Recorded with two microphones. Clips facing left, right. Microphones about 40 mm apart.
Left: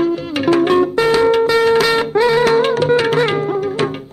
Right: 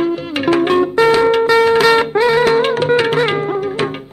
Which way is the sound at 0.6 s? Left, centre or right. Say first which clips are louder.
Right 1 dB; centre.